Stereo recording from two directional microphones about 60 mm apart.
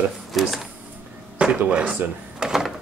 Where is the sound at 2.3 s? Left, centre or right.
Centre.